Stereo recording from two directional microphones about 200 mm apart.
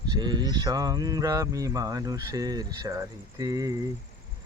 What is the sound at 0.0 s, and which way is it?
Speech, 20° right (ahead or behind).